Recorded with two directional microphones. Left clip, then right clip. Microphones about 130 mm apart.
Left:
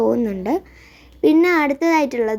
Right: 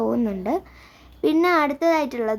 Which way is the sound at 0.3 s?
15° left (ahead or behind).